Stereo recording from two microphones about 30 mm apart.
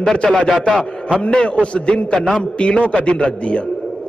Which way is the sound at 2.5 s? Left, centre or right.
Left.